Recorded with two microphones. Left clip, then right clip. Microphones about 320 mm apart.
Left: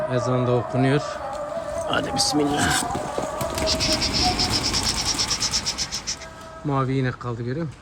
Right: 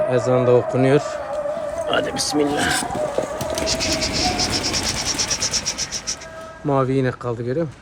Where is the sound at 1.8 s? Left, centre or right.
Centre.